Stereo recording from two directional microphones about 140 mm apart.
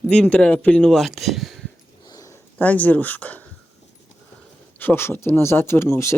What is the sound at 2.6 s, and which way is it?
Speech, 10° left (ahead or behind).